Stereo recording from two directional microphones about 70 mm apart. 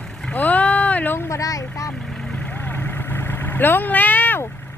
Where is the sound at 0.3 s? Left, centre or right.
Left.